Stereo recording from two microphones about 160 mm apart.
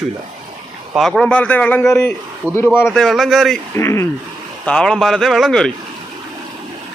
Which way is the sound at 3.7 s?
15° left (ahead or behind).